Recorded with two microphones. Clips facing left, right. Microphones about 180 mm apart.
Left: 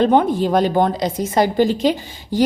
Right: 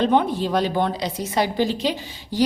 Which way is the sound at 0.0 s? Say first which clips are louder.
Left 4 dB; 50° left (ahead or behind).